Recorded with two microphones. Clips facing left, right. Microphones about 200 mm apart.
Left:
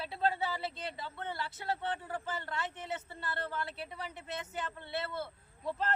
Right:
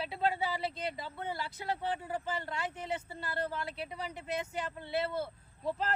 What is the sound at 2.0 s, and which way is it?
A man's voice, 20° right (ahead or behind).